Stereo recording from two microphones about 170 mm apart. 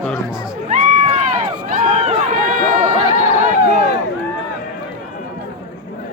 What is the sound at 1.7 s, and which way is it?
Run, 45° right (ahead or behind).